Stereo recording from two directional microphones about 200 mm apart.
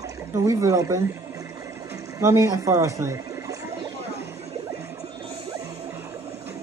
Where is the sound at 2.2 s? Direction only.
15° right (ahead or behind).